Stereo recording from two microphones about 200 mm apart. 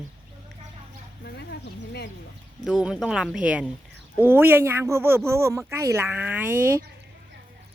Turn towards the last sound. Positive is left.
turn(degrees=-10)  # may be behind; listen again after turning